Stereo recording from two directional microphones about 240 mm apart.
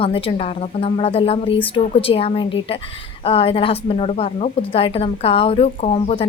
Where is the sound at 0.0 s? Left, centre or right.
Left.